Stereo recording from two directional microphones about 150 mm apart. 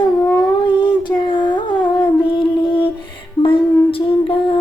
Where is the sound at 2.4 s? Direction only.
35° left (ahead or behind).